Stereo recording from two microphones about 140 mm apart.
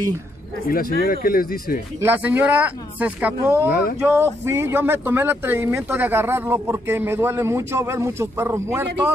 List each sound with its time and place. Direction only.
0.9 s speech: 90° left
2.0 s speech: 15° right (ahead or behind)